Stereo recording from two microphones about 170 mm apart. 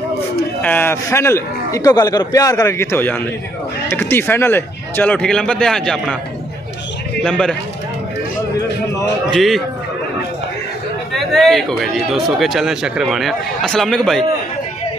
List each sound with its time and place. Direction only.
0.6 s a man's voice: 10° left (ahead or behind)
7.2 s speech: 5° left (ahead or behind)
9.3 s speech: centre (ahead or behind)
11.3 s speech: centre (ahead or behind)